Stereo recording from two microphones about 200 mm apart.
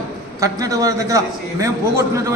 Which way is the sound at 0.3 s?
15° right (ahead or behind).